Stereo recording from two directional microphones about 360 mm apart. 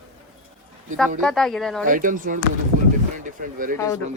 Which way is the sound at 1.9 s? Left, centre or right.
Right.